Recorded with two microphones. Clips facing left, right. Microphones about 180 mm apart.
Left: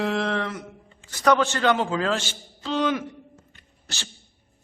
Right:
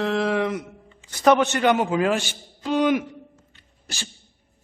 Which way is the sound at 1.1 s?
20° right (ahead or behind).